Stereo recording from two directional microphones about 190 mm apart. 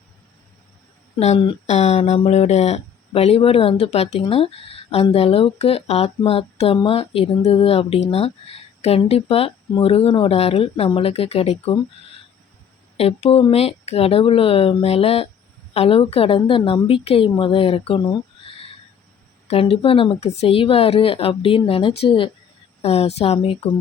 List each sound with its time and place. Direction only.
1.2 s speech: 30° left (ahead or behind)
13.0 s a woman's voice: 30° left (ahead or behind)